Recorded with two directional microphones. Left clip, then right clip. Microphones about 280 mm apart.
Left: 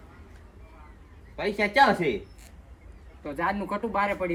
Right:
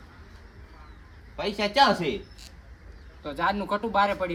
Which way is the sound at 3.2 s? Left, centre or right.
Right.